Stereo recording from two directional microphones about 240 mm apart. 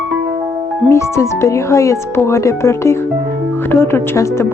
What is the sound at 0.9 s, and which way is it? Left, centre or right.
Speech, centre.